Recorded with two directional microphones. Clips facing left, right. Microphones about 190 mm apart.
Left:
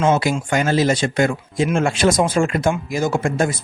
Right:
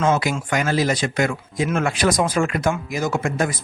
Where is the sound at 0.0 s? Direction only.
25° left (ahead or behind).